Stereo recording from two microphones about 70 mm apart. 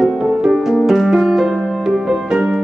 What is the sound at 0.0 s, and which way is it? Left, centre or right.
Music, centre.